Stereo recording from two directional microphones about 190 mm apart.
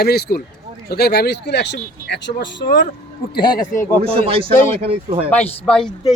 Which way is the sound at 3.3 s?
20° left (ahead or behind).